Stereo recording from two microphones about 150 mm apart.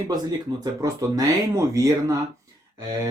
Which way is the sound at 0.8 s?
20° right (ahead or behind).